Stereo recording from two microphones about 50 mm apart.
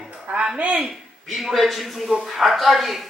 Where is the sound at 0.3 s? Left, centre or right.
Centre.